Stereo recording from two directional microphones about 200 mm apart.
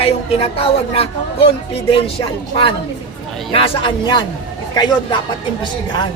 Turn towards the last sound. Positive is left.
turn(degrees=20)  # may be behind; listen again after turning